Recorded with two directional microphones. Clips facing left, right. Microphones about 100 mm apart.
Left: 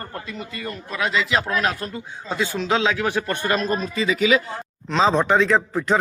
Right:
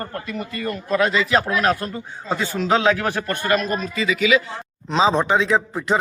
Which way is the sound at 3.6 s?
35° left (ahead or behind).